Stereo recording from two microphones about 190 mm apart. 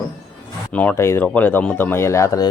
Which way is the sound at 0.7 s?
10° left (ahead or behind).